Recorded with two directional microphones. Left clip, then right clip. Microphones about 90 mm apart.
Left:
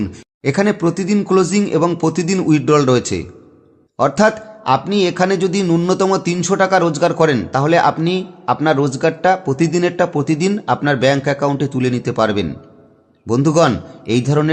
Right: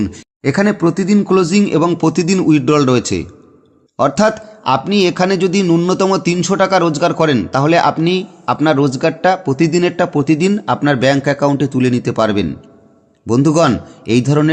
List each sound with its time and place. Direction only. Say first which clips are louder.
0.0 s a man's voice: right 2 dB; 35° right (ahead or behind)